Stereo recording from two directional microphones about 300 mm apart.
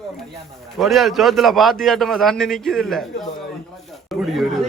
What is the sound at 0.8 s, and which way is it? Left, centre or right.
A man's voice, centre.